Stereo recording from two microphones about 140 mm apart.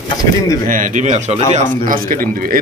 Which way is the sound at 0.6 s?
70° right (ahead or behind).